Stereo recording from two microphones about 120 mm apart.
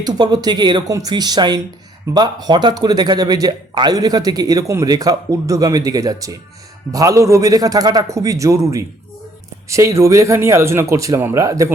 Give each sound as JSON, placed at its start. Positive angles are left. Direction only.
{"t": 0.0, "sound": "speech", "side_deg": -35}